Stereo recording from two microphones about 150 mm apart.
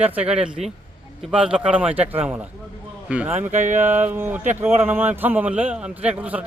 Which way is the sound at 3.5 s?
50° right (ahead or behind).